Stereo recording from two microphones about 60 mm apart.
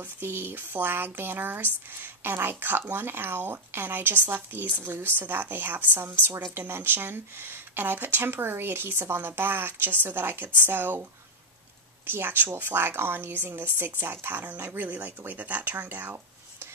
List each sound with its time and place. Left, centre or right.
0.0 s speech: right
12.1 s speech: right